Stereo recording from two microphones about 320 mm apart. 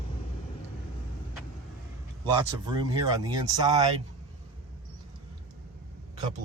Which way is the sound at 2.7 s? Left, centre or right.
Centre.